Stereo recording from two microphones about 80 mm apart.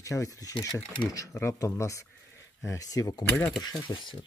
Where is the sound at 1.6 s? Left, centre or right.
Left.